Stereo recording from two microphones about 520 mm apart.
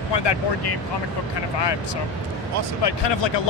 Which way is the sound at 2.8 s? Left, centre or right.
Left.